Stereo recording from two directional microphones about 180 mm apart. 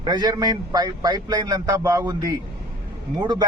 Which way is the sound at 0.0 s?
25° right (ahead or behind).